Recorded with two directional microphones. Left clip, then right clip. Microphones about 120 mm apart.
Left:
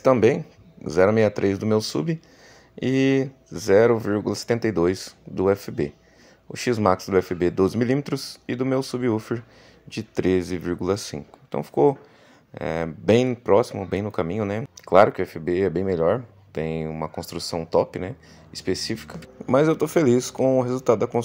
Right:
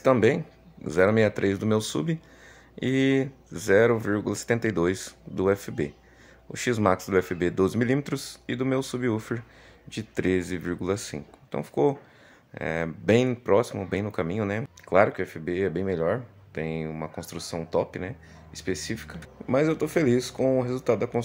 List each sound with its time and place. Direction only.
0.0 s speech: 20° left (ahead or behind)
14.9 s speech: 40° left (ahead or behind)